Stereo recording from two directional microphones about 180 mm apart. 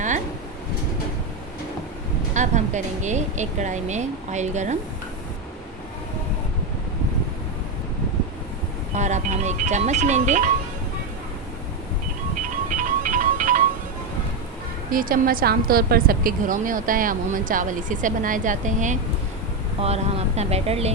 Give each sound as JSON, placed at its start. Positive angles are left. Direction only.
{"t": 2.3, "sound": "speech", "side_deg": -45}
{"t": 9.0, "sound": "speech", "side_deg": -40}
{"t": 12.4, "sound": "music", "side_deg": -45}
{"t": 14.8, "sound": "a woman's voice", "side_deg": -50}